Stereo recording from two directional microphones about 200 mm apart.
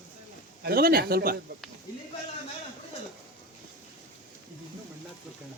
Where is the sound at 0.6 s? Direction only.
50° right (ahead or behind).